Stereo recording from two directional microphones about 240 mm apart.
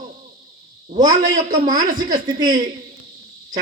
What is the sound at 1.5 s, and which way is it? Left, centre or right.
A man's voice, centre.